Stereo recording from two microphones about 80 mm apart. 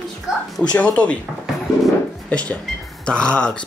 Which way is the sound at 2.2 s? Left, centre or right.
Centre.